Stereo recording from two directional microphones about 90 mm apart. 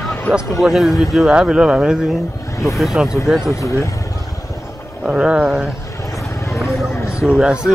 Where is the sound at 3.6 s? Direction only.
35° left (ahead or behind).